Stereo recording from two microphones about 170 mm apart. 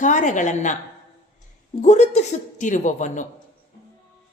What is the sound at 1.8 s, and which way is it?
A woman's voice, 40° left (ahead or behind).